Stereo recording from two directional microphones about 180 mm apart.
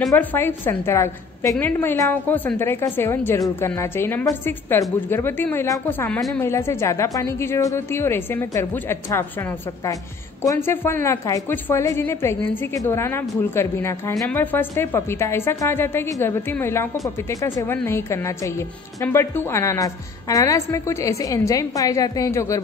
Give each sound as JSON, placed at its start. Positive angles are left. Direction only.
{"t": 0.1, "sound": "a woman's voice", "side_deg": 10}
{"t": 10.4, "sound": "a woman's voice", "side_deg": 15}